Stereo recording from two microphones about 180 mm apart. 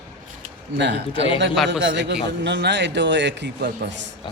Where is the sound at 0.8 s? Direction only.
75° right (ahead or behind).